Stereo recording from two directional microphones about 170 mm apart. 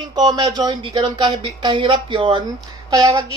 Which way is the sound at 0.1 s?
25° right (ahead or behind).